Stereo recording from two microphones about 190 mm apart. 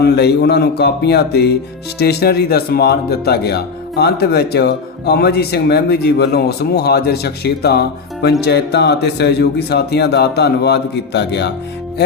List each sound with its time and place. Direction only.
0.0 s speech: 60° left (ahead or behind)